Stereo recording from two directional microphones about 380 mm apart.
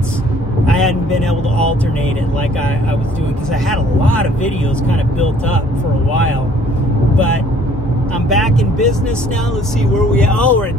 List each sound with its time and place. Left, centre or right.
0.7 s vehicle: centre
3.6 s speech: centre
8.3 s speech: centre
9.9 s speech: centre